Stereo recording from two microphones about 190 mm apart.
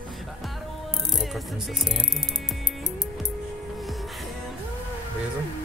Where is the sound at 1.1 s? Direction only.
Centre (ahead or behind).